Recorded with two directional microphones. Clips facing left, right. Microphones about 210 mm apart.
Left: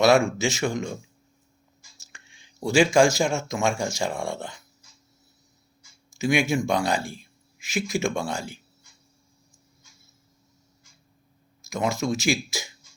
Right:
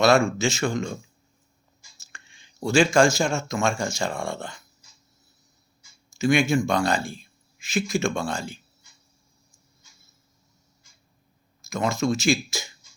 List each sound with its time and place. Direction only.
0.3 s speech: 15° left (ahead or behind)
2.1 s a sound: 10° left (ahead or behind)
3.3 s speech: 15° left (ahead or behind)
6.1 s speech: 10° left (ahead or behind)
11.7 s speech: 15° left (ahead or behind)